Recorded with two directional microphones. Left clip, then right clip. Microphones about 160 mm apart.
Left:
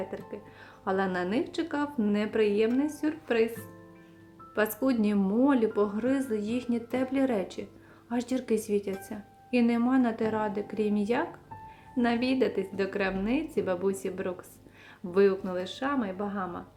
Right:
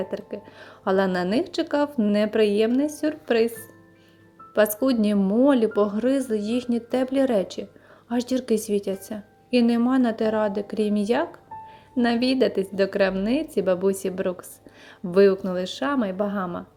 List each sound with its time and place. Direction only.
0.0 s speech: 30° right (ahead or behind)
4.5 s speech: 25° right (ahead or behind)